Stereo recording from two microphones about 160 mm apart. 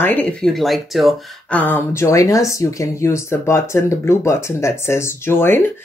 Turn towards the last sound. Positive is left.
turn(degrees=15)  # may be behind; listen again after turning